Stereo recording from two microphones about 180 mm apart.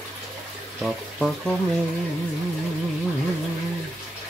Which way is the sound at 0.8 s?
Centre (ahead or behind).